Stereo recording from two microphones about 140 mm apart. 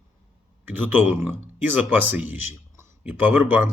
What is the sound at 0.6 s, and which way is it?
Speech, 15° right (ahead or behind).